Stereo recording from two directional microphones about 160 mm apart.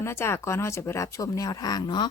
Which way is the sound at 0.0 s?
15° left (ahead or behind).